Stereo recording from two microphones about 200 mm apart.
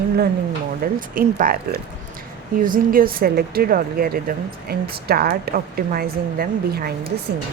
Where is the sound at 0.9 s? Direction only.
45° right (ahead or behind).